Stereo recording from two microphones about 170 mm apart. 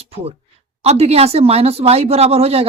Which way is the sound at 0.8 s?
35° right (ahead or behind).